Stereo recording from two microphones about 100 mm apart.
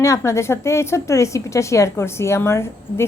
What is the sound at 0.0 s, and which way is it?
A woman's voice, 30° left (ahead or behind).